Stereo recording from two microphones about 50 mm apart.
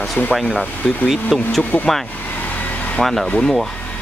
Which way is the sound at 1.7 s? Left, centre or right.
Left.